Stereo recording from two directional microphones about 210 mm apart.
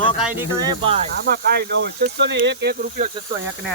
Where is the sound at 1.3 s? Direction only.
50° right (ahead or behind).